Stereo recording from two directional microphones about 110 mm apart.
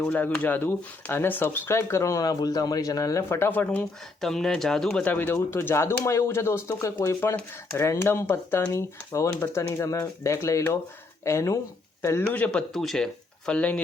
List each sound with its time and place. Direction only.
0.0 s speech: 15° left (ahead or behind)
4.2 s speech: 5° left (ahead or behind)
5.0 s speech: 15° left (ahead or behind)
12.3 s speech: 10° left (ahead or behind)